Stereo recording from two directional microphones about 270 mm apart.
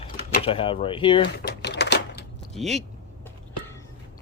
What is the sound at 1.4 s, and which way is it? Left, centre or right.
Typewriter, left.